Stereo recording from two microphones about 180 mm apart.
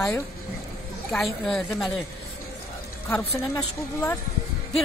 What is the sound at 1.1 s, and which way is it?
Speech, centre (ahead or behind).